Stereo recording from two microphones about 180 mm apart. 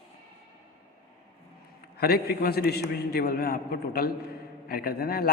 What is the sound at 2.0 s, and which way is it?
A man's voice, 60° left (ahead or behind).